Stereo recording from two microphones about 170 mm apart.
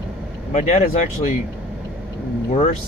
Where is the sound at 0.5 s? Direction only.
40° left (ahead or behind).